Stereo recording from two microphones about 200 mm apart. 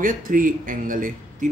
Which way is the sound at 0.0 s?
45° right (ahead or behind).